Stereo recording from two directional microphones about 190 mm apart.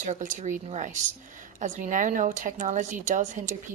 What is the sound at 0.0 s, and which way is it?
A woman's voice, 40° right (ahead or behind).